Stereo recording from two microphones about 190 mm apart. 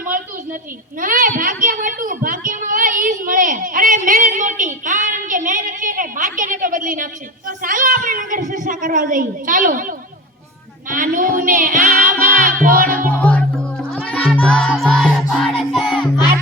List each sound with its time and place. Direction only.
0.9 s a sound: 45° right (ahead or behind)
10.8 s a woman's voice: 45° right (ahead or behind)
13.1 s music: 5° left (ahead or behind)